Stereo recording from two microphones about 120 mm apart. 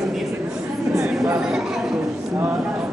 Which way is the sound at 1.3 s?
5° right (ahead or behind).